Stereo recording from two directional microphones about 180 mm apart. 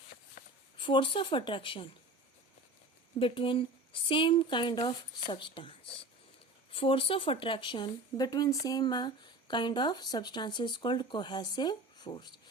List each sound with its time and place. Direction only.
0.4 s a sound: 55° left (ahead or behind)
0.8 s speech: 30° left (ahead or behind)
3.2 s speech: 30° left (ahead or behind)